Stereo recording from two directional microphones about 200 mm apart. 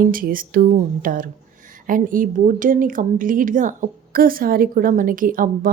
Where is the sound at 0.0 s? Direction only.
45° right (ahead or behind).